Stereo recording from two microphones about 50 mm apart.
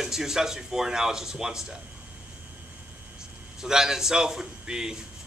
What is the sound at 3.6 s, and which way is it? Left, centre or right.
Speech, centre.